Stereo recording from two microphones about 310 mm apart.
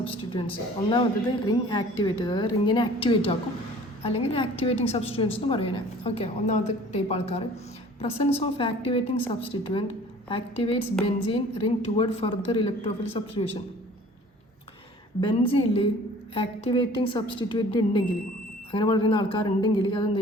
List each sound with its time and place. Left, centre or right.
0.0 s a woman's voice: centre
15.2 s speech: centre